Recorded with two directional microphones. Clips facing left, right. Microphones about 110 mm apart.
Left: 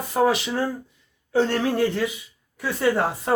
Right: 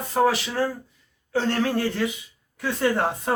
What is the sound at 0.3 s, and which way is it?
Speech, 20° left (ahead or behind).